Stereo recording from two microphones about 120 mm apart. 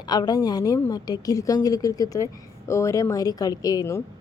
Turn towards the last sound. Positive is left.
turn(degrees=30)  # may be behind; listen again after turning